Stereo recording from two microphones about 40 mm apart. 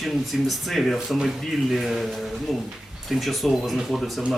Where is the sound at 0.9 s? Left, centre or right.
Centre.